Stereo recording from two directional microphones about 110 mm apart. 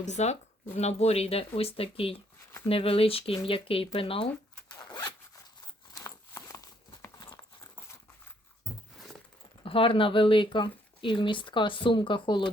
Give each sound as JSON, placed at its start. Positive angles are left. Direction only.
{"t": 0.0, "sound": "speech", "side_deg": 90}
{"t": 0.8, "sound": "speech", "side_deg": 80}
{"t": 4.8, "sound": "zipper", "side_deg": 40}
{"t": 5.9, "sound": "a sound", "side_deg": 30}
{"t": 7.2, "sound": "clip-clop", "side_deg": 30}
{"t": 9.6, "sound": "speech", "side_deg": 55}